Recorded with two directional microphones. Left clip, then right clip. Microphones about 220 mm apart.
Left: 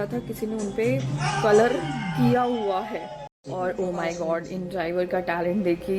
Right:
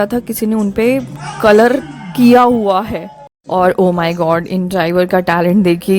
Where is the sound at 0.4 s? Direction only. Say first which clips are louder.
Right 11 dB; 55° right (ahead or behind).